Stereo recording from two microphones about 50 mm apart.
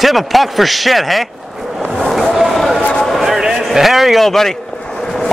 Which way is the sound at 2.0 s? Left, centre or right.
Centre.